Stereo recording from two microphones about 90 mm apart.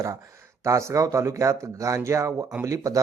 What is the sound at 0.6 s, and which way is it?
Speech, 35° right (ahead or behind).